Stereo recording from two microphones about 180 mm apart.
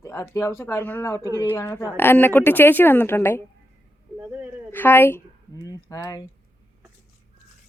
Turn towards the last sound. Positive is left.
turn(degrees=20)  # may be behind; listen again after turning